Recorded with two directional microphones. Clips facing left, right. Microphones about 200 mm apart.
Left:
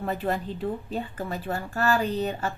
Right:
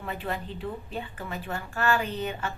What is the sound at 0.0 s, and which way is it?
A woman's voice, 40° left (ahead or behind).